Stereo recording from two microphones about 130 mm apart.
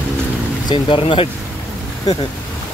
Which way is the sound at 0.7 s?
40° left (ahead or behind).